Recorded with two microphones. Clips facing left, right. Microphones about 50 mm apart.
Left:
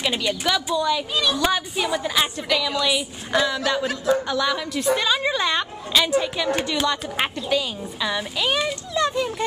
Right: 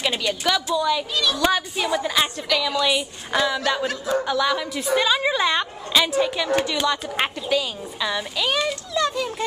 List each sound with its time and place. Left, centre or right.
0.0 s a woman's voice: centre
1.1 s speech: centre
1.4 s a woman's voice: centre